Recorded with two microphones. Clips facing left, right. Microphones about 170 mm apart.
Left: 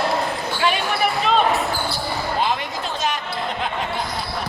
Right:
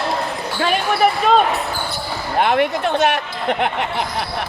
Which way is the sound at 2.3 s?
60° right (ahead or behind).